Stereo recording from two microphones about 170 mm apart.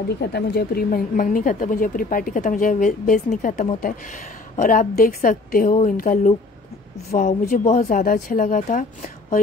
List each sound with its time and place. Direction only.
0.2 s a woman's voice: 70° left (ahead or behind); by 9.4 s 50° left (ahead or behind)